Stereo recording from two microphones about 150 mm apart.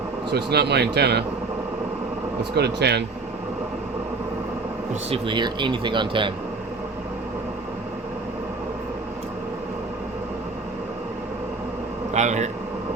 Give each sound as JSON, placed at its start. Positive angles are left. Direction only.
{"t": 0.3, "sound": "speech", "side_deg": -90}
{"t": 2.4, "sound": "speech", "side_deg": -90}
{"t": 5.1, "sound": "speech", "side_deg": -30}
{"t": 12.1, "sound": "a man's voice", "side_deg": -50}